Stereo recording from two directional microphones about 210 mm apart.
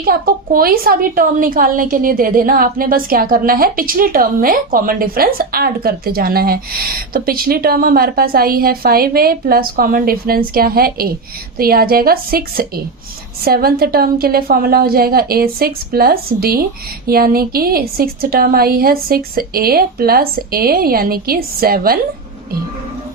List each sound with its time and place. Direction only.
0.0 s a woman's voice: 45° right (ahead or behind)